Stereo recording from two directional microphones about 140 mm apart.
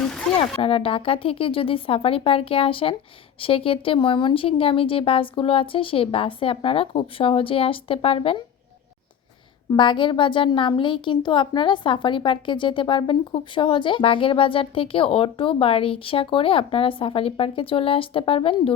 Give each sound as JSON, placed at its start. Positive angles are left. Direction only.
{"t": 0.0, "sound": "a sound", "side_deg": 5}
{"t": 0.6, "sound": "a woman's voice", "side_deg": 40}
{"t": 9.6, "sound": "a woman's voice", "side_deg": 35}